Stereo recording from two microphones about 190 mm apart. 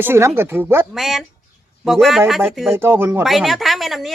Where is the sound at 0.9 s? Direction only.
Centre (ahead or behind).